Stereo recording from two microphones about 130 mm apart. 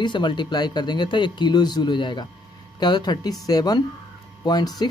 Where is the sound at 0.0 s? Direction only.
35° left (ahead or behind).